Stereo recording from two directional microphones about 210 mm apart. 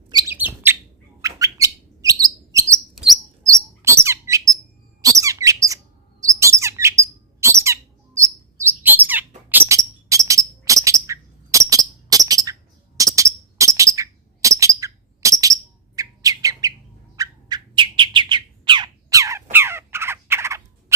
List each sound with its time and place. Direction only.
0.3 s bird: 10° right (ahead or behind)
3.4 s chirp: 15° right (ahead or behind)
5.0 s bird: 15° right (ahead or behind)